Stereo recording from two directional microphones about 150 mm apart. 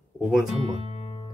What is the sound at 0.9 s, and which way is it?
Music, 40° left (ahead or behind).